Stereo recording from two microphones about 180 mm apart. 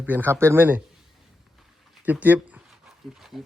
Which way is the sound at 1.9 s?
10° right (ahead or behind).